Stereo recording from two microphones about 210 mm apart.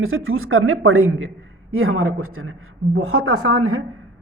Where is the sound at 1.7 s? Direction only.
75° right (ahead or behind).